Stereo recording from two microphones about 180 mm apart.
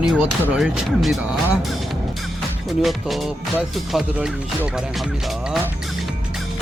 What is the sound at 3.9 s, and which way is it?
Speech, 5° right (ahead or behind).